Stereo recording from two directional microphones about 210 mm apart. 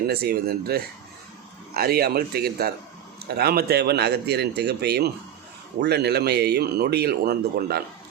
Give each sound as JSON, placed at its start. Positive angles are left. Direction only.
{"t": 0.1, "sound": "speech", "side_deg": -50}